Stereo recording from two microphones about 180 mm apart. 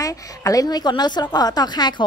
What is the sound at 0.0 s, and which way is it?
A woman's voice, 20° left (ahead or behind).